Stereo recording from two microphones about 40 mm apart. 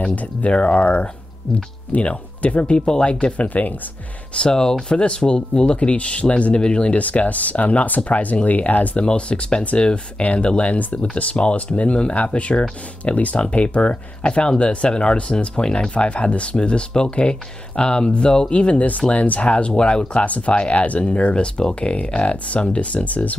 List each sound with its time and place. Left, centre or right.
0.1 s speech: left
3.4 s speech: left
4.4 s speech: centre; by 9.0 s left
9.0 s speech: left
10.2 s speech: left
20.2 s speech: left